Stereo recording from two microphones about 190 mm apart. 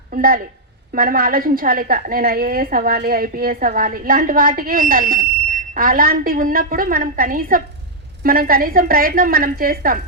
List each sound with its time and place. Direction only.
0.1 s a woman's voice: 50° right (ahead or behind)